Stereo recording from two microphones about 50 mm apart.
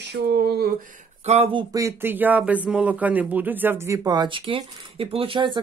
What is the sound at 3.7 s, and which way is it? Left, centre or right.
Speech, right.